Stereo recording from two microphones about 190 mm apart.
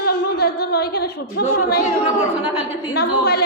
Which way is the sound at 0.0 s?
55° left (ahead or behind).